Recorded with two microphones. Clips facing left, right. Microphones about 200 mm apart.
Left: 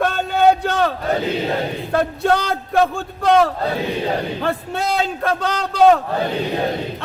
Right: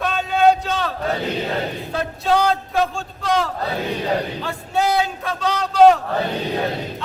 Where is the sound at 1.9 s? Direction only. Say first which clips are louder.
Left 3 dB; 60° left (ahead or behind).